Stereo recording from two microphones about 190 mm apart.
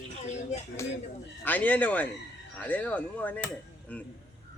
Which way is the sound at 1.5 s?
10° left (ahead or behind).